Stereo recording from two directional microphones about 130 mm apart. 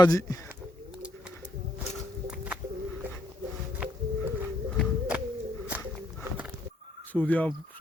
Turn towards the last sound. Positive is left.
turn(degrees=10)  # may be behind; listen again after turning